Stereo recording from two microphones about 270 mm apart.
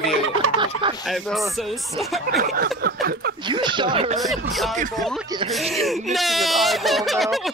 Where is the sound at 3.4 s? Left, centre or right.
Centre.